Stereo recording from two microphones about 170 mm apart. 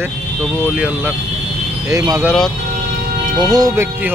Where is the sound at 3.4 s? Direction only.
20° right (ahead or behind).